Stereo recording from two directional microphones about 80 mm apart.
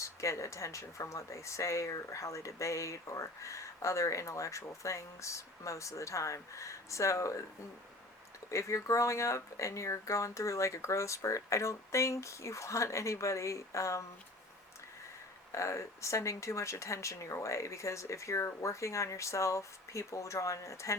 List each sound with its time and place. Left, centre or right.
0.0 s speech: left
8.4 s speech: left
15.5 s speech: left